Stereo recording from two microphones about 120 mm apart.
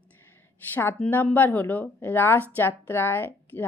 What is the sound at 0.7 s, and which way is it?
Speech, 15° left (ahead or behind).